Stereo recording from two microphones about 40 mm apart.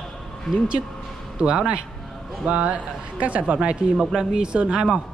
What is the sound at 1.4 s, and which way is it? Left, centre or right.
Speech, right.